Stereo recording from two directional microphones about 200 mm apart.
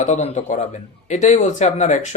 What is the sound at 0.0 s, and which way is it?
Speech, 35° left (ahead or behind).